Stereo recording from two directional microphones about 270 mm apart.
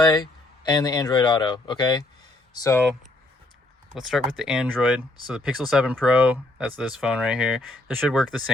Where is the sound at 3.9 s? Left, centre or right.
Centre.